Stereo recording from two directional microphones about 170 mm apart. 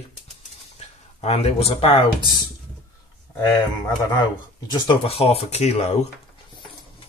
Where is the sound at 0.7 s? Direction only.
40° left (ahead or behind).